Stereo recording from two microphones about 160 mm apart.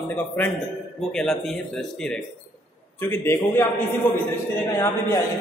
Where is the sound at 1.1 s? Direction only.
Centre (ahead or behind).